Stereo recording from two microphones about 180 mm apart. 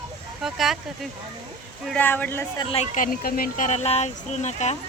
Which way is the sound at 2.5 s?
35° left (ahead or behind).